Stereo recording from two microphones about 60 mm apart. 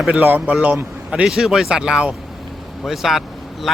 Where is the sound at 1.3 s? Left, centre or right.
Centre.